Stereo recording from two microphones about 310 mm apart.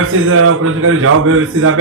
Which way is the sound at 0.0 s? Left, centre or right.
Right.